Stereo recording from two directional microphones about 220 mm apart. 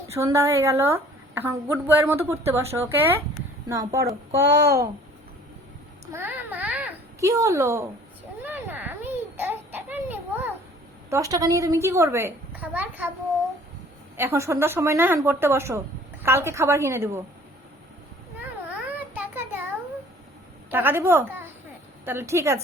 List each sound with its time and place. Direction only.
0.1 s a woman's voice: 15° right (ahead or behind)
4.4 s speech: 50° right (ahead or behind)
6.1 s a sound: 10° right (ahead or behind)
8.4 s babbling: 10° right (ahead or behind)
11.1 s a woman's voice: 15° right (ahead or behind)
14.2 s a woman's voice: 10° right (ahead or behind)
18.9 s child singing: 10° right (ahead or behind)
20.7 s a woman's voice: 10° right (ahead or behind)